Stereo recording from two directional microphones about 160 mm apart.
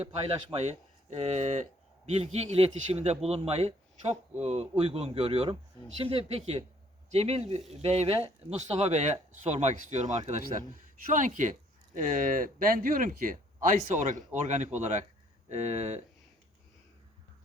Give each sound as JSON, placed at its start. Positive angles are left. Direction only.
{"t": 0.0, "sound": "speech", "side_deg": -40}